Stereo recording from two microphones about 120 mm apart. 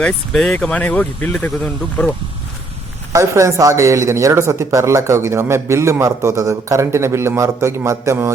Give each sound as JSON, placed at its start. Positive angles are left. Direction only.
{"t": 0.0, "sound": "speech", "side_deg": 5}
{"t": 3.1, "sound": "speech", "side_deg": -25}